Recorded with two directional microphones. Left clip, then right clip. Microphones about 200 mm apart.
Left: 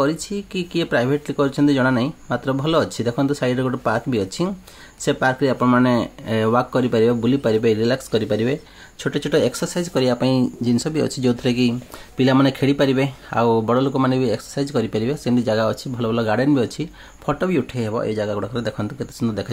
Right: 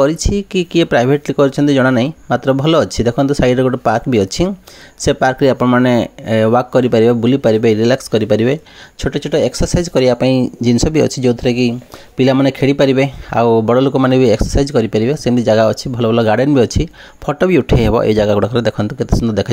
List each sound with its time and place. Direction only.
0.0 s speech: 30° right (ahead or behind)
9.0 s speech: 20° right (ahead or behind)